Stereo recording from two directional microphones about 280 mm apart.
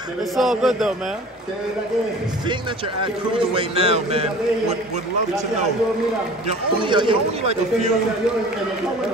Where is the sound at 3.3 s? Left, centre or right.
Centre.